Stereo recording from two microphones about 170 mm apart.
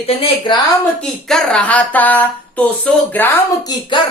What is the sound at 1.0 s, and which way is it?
Speech, 5° left (ahead or behind).